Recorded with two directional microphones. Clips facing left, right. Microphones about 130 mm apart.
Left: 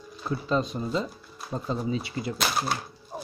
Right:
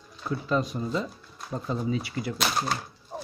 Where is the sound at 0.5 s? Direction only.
25° left (ahead or behind).